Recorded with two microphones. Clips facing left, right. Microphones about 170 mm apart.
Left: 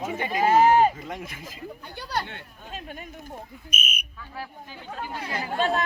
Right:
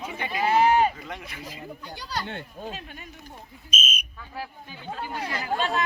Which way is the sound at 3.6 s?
60° left (ahead or behind).